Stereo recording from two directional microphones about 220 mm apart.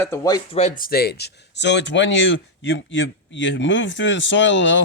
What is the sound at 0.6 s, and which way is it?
Speech, 35° left (ahead or behind).